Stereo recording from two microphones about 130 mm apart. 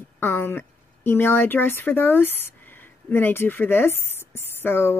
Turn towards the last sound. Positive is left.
turn(degrees=15)  # may be behind; listen again after turning